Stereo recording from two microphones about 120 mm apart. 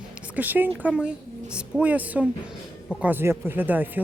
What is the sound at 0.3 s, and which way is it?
Speech, 15° right (ahead or behind).